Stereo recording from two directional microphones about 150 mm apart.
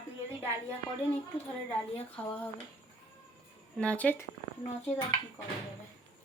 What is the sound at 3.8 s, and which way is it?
Speech, 10° left (ahead or behind).